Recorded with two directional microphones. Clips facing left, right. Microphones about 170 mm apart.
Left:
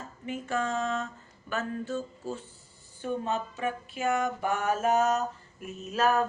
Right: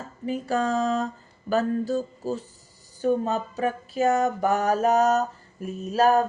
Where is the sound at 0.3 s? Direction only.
35° right (ahead or behind).